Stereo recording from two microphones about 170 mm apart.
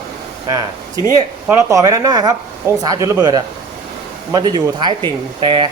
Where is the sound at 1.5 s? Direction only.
20° right (ahead or behind).